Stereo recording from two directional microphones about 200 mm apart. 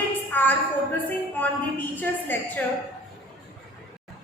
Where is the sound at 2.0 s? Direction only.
10° left (ahead or behind).